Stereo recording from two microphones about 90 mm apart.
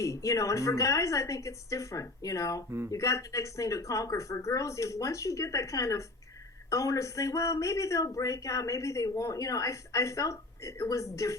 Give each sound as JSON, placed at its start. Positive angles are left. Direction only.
{"t": 0.0, "sound": "speech", "side_deg": 35}